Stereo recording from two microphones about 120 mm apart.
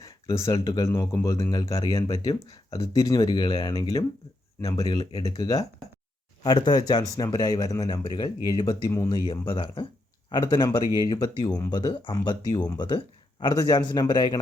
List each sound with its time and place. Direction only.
0.0 s speech: 25° left (ahead or behind)
3.2 s speech: 40° left (ahead or behind)